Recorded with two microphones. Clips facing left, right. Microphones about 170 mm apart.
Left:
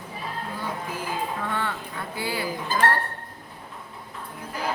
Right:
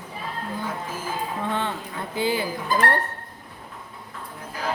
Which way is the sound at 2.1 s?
20° right (ahead or behind).